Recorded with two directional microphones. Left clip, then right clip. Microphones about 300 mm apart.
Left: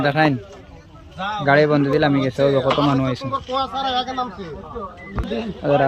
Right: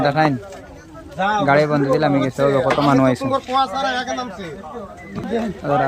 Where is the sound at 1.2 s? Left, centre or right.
Right.